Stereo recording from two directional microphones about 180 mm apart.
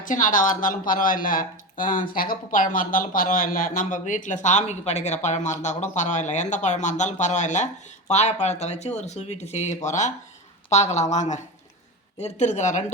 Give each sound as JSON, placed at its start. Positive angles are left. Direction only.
{"t": 0.0, "sound": "speech", "side_deg": 45}